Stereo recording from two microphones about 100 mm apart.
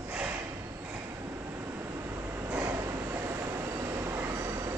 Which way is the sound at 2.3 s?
25° right (ahead or behind).